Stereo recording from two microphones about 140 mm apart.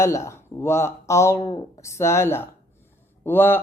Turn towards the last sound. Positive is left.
turn(degrees=15)  # may be behind; listen again after turning